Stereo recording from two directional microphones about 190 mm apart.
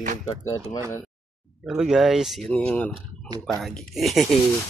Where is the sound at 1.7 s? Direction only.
Centre (ahead or behind).